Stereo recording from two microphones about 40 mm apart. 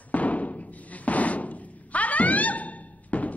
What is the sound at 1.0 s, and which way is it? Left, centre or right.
Door, left.